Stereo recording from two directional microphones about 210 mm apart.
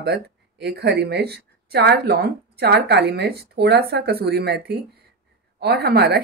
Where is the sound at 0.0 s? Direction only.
50° right (ahead or behind).